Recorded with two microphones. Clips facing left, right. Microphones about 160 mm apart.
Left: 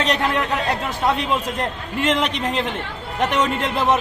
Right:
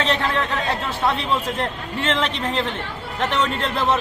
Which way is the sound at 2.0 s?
15° left (ahead or behind).